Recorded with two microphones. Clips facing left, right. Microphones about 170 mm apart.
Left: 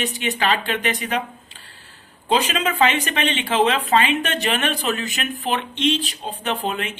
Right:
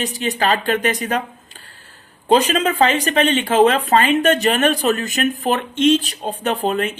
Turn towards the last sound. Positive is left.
turn(degrees=-40)  # may be behind; listen again after turning